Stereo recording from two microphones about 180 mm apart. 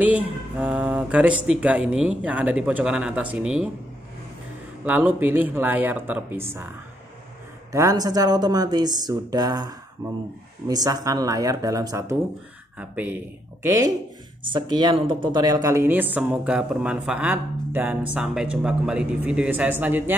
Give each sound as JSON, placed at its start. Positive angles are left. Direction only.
{"t": 0.0, "sound": "speech", "side_deg": -5}
{"t": 4.8, "sound": "speech", "side_deg": -10}
{"t": 7.7, "sound": "speech", "side_deg": -20}
{"t": 12.7, "sound": "speech", "side_deg": -10}